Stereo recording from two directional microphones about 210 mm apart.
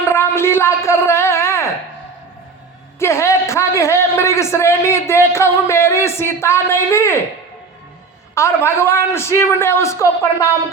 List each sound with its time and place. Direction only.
0.1 s a sound: 10° left (ahead or behind)
3.0 s a man's voice: 10° left (ahead or behind)
8.4 s a man's voice: 10° left (ahead or behind)